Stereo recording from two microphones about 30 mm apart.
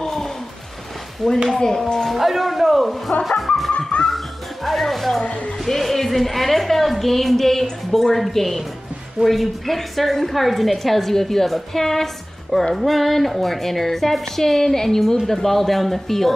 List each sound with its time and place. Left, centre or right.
1.2 s speech: centre
1.6 s speech: left
2.1 s a woman's voice: centre
3.3 s music: centre
4.6 s a woman's voice: centre
5.2 s speech: left
5.7 s a woman's voice: centre